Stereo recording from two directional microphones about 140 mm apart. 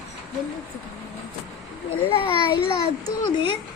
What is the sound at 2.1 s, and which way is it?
Speech, 40° left (ahead or behind).